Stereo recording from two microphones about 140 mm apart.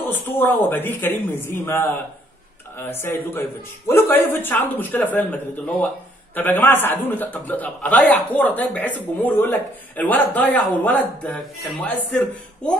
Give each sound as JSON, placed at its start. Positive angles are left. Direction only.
{"t": 0.1, "sound": "speech", "side_deg": 15}